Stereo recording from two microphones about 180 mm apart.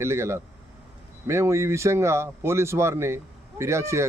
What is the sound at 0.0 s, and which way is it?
Speech, 15° right (ahead or behind).